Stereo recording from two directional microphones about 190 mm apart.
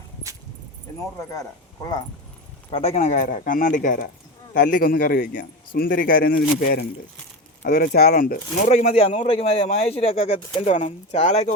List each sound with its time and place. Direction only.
2.6 s speech: 35° left (ahead or behind)